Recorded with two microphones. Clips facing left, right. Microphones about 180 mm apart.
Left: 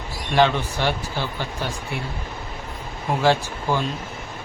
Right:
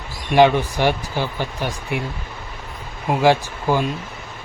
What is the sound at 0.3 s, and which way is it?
Speech, 15° right (ahead or behind).